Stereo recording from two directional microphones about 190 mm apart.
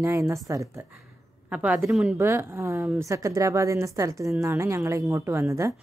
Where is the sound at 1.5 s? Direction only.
5° right (ahead or behind).